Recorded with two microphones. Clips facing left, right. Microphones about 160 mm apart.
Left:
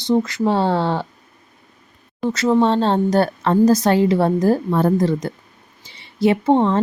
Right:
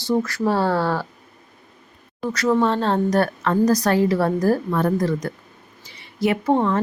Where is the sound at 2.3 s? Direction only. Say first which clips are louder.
Left 3 dB; 25° left (ahead or behind).